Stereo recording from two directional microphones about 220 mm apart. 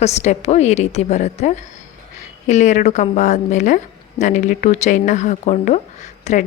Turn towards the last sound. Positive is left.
turn(degrees=30)  # may be behind; listen again after turning